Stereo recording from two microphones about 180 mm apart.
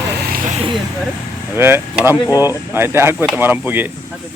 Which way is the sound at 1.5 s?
15° right (ahead or behind).